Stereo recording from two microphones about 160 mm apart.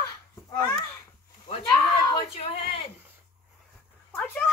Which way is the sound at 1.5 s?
30° left (ahead or behind).